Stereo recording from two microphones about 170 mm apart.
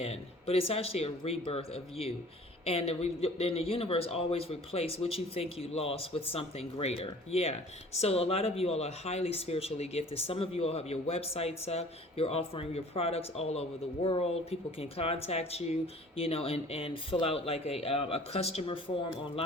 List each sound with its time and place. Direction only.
0.0 s speech: 35° left (ahead or behind)